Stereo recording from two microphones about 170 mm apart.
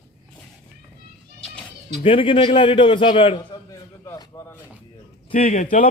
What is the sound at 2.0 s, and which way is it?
A man's voice, 30° left (ahead or behind).